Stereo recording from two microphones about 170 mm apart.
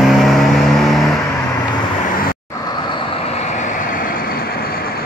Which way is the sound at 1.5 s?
25° left (ahead or behind).